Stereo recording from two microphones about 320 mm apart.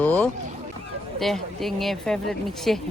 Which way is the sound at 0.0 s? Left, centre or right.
Centre.